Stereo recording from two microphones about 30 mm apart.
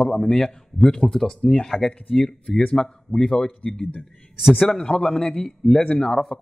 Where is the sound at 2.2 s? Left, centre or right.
Left.